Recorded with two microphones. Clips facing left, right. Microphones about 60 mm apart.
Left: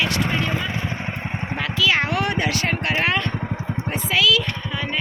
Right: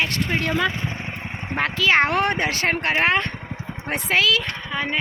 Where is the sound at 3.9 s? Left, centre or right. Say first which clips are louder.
Right 2 dB; right.